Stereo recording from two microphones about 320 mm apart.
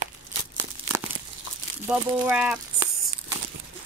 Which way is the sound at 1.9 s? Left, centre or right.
Centre.